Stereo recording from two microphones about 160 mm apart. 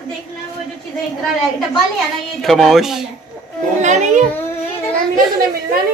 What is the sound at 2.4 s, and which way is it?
Speech, centre (ahead or behind).